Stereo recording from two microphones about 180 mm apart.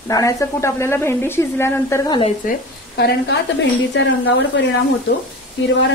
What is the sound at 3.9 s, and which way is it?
Speech, 90° left.